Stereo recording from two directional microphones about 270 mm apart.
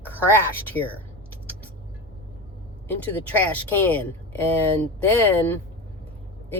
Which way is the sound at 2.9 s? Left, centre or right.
Centre.